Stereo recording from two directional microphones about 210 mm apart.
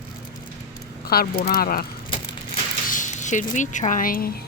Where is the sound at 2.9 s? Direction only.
35° left (ahead or behind).